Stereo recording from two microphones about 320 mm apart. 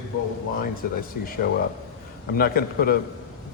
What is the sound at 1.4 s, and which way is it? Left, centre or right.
A man's voice, left.